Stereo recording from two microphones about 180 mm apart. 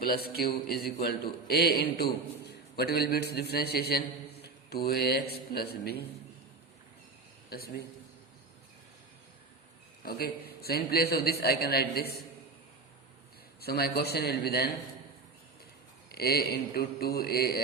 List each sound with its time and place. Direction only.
0.0 s a man's voice: 60° left (ahead or behind)
10.0 s a man's voice: 60° left (ahead or behind)
13.6 s a man's voice: 60° left (ahead or behind)
16.1 s a man's voice: 60° left (ahead or behind)